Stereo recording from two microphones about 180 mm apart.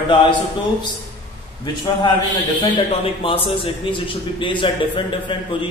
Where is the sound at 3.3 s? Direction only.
30° left (ahead or behind).